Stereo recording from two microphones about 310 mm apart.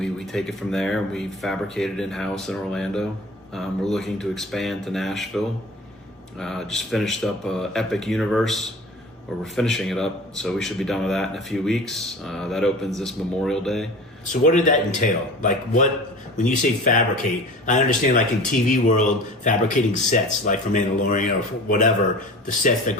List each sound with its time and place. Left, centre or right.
0.0 s speech: centre
14.4 s speech: left